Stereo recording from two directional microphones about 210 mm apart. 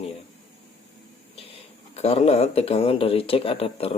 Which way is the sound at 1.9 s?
30° left (ahead or behind).